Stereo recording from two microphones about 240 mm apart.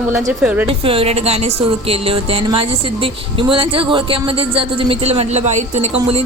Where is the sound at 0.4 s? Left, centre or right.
Centre.